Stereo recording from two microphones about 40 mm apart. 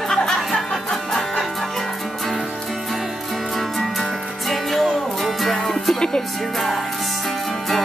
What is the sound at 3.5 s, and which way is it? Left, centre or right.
Music, centre.